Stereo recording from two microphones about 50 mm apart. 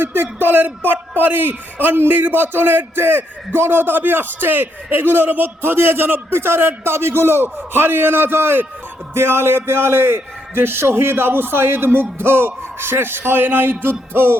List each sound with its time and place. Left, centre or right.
0.0 s a man's voice: right